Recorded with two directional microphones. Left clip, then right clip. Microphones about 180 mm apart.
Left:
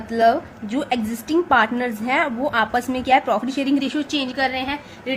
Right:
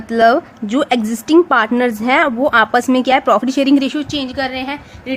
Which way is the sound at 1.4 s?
40° right (ahead or behind).